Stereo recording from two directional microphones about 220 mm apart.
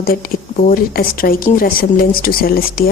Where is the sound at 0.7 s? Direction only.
40° left (ahead or behind).